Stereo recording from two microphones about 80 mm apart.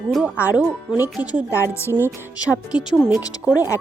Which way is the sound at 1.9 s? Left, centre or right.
Right.